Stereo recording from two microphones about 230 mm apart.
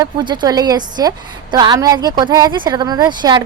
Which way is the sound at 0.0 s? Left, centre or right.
Centre.